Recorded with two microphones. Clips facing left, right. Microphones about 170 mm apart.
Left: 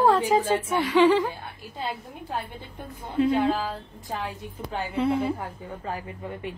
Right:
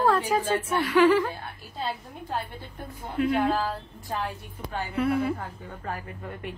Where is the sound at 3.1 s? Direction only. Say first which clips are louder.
Left 2 dB; 20° left (ahead or behind).